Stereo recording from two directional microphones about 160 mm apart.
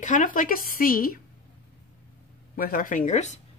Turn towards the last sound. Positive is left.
turn(degrees=45)  # may be behind; listen again after turning